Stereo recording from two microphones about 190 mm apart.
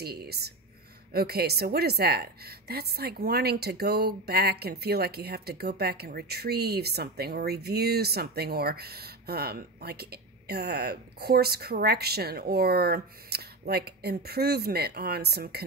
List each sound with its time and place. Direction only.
0.0 s a woman's voice: 55° right (ahead or behind)